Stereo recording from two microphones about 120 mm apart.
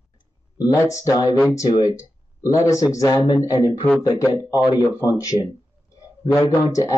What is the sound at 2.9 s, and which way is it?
Speech, 25° left (ahead or behind).